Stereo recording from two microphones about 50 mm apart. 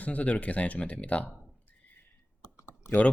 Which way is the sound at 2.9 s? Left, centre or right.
Left.